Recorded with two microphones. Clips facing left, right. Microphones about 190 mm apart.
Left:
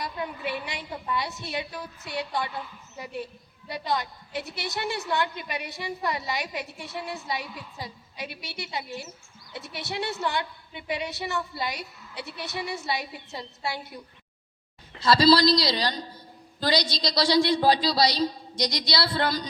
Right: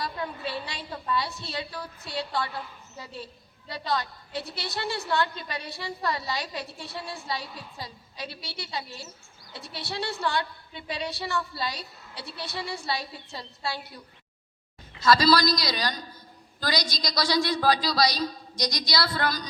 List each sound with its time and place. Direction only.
0.0 s a woman's voice: 15° left (ahead or behind)